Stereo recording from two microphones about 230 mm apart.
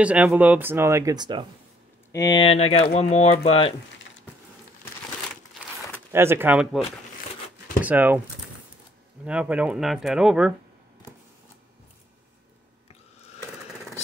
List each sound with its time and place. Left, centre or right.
0.0 s speech: centre
2.1 s speech: centre
5.9 s speech: centre
9.2 s speech: centre